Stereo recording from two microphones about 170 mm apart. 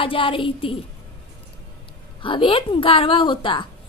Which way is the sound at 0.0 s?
30° left (ahead or behind).